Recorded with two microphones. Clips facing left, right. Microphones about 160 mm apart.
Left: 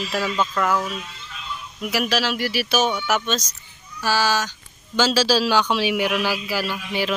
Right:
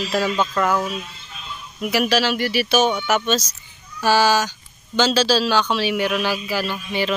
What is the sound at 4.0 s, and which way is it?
Speech, 20° right (ahead or behind).